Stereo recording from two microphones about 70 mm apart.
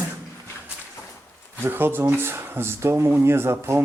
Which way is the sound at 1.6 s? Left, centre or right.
Right.